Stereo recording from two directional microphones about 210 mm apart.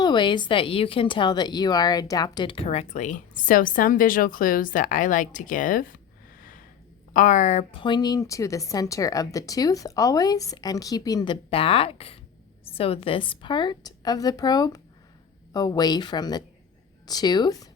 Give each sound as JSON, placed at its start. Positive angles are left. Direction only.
{"t": 0.0, "sound": "speech", "side_deg": 20}
{"t": 7.1, "sound": "a woman's voice", "side_deg": 35}